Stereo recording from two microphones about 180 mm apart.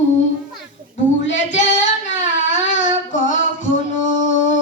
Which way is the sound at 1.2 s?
90° left.